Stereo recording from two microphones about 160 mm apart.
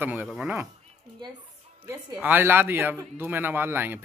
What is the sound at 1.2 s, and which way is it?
Speech, 25° right (ahead or behind).